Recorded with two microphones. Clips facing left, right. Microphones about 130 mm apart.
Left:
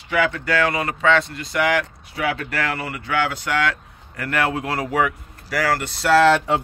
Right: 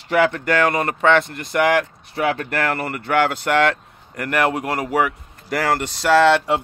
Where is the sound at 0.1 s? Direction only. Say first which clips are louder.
Right 3 dB; 50° right (ahead or behind).